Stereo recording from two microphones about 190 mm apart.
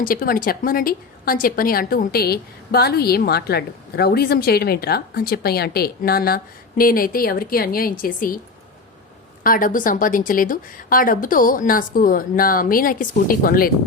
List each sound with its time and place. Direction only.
0.0 s speech: 50° left (ahead or behind)
9.4 s speech: 45° left (ahead or behind)